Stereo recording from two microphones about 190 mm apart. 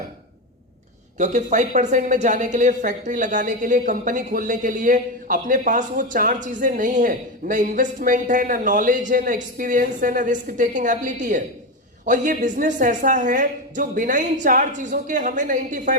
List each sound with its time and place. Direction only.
1.2 s a woman's voice: 40° right (ahead or behind)